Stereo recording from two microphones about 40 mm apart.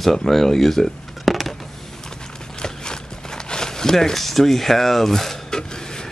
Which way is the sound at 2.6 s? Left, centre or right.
Centre.